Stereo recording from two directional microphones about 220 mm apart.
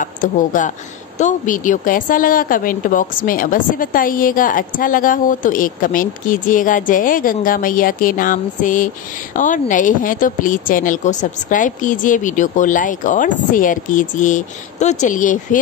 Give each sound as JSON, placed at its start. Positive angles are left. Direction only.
{"t": 0.0, "sound": "a woman's voice", "side_deg": 35}